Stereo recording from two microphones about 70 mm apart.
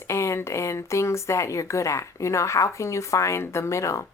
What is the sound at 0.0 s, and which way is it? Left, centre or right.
Speech, left.